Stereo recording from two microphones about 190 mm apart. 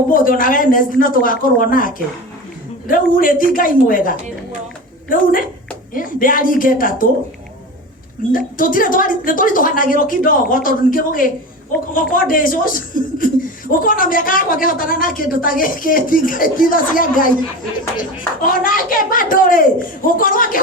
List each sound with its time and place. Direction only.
0.1 s speech: 45° left (ahead or behind)
8.3 s speech: 45° left (ahead or behind)
18.4 s speech: 45° left (ahead or behind)